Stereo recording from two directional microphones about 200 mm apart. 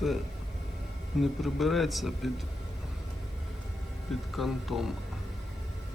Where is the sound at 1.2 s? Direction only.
Centre (ahead or behind).